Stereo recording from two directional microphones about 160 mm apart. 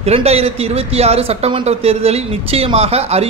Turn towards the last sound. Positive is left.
turn(degrees=-40)  # may be behind; listen again after turning